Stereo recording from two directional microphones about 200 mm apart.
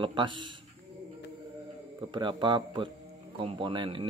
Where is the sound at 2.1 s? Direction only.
25° right (ahead or behind).